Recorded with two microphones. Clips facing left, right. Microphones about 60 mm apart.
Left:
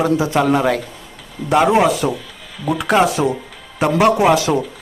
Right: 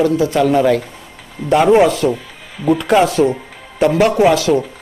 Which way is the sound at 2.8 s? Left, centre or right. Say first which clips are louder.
Right 1 dB; centre.